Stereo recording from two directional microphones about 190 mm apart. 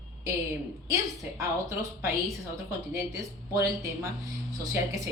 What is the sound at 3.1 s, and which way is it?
Speech, 15° right (ahead or behind).